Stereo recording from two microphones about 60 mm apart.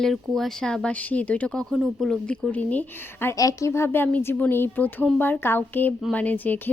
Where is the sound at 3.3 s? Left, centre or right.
Left.